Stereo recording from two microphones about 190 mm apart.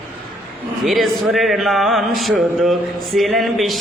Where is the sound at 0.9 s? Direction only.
Centre (ahead or behind).